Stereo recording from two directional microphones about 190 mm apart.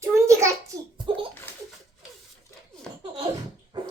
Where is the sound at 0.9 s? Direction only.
25° right (ahead or behind).